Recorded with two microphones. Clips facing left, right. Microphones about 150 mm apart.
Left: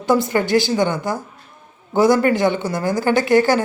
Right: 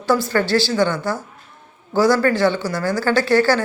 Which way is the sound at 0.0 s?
20° left (ahead or behind).